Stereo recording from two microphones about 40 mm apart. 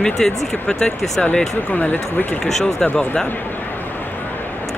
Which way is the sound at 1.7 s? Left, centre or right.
Left.